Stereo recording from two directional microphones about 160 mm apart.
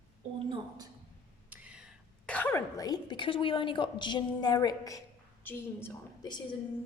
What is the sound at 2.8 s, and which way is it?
A woman's voice, 25° left (ahead or behind).